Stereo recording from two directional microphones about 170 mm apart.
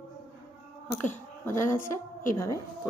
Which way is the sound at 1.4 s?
15° left (ahead or behind).